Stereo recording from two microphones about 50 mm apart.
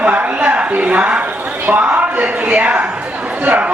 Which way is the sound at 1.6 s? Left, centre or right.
Right.